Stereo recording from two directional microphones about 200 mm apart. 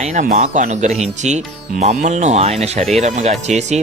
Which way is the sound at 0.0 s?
40° right (ahead or behind).